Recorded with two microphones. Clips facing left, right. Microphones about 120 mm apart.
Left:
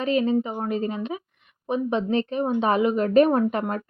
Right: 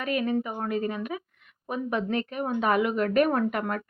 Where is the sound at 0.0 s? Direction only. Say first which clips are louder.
Left 5 dB; 25° left (ahead or behind).